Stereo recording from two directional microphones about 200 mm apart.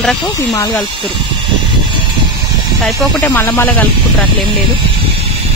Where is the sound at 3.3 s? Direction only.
10° left (ahead or behind).